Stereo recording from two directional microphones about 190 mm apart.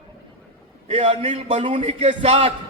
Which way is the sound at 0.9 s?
35° right (ahead or behind).